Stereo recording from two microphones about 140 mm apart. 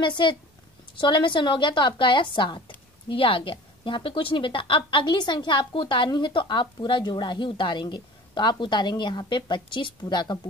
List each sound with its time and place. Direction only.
0.0 s a woman's voice: 35° left (ahead or behind)